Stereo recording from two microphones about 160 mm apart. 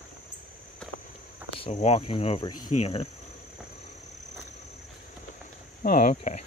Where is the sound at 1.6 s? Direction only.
45° left (ahead or behind).